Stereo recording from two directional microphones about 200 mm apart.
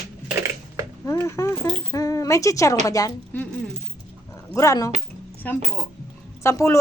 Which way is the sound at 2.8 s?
15° left (ahead or behind).